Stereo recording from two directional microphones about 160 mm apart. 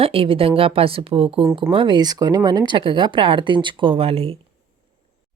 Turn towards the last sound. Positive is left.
turn(degrees=-35)  # may be behind; listen again after turning